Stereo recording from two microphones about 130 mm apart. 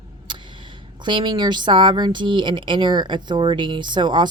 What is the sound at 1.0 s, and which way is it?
Speech, 35° right (ahead or behind).